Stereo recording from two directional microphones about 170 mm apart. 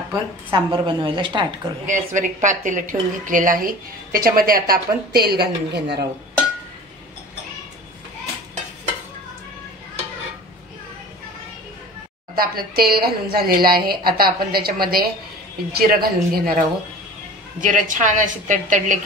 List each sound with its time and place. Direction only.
0.5 s a woman's voice: 30° right (ahead or behind)
1.9 s a woman's voice: 45° right (ahead or behind); by 6.0 s 75° right (ahead or behind)
12.4 s a woman's voice: 60° right (ahead or behind)
17.6 s a woman's voice: 50° right (ahead or behind)